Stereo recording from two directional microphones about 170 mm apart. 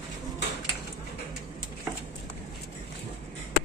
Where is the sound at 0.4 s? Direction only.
90° left.